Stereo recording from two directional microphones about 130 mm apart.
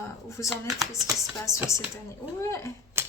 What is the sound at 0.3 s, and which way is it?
Speech, 25° left (ahead or behind).